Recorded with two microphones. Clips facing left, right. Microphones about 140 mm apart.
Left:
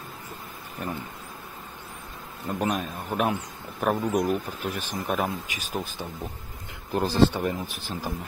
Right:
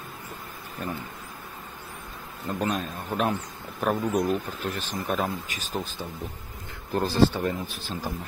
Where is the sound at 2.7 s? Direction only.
10° left (ahead or behind).